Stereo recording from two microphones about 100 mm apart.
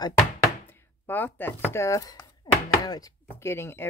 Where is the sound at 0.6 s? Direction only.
25° left (ahead or behind).